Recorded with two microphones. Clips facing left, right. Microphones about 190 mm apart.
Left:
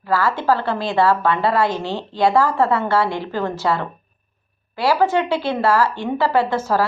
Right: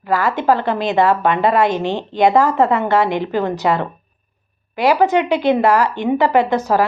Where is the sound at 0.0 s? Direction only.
20° right (ahead or behind).